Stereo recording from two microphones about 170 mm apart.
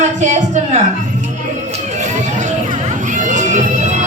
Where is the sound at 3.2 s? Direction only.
50° right (ahead or behind).